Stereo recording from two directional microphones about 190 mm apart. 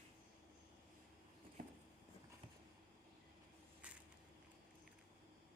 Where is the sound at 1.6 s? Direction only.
45° right (ahead or behind).